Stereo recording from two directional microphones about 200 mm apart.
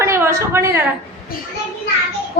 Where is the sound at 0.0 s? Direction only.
15° right (ahead or behind).